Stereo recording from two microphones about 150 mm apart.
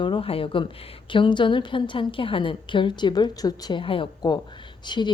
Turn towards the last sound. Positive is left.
turn(degrees=30)  # may be behind; listen again after turning